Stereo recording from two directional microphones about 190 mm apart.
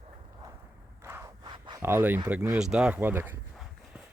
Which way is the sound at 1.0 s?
10° right (ahead or behind).